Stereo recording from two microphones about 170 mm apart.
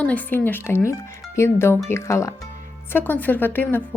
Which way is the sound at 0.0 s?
10° left (ahead or behind).